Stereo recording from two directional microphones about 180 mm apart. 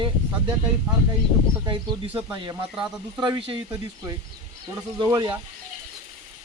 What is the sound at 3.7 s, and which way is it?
Speech, 15° right (ahead or behind).